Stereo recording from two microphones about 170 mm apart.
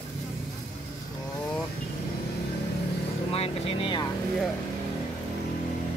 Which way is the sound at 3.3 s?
35° left (ahead or behind).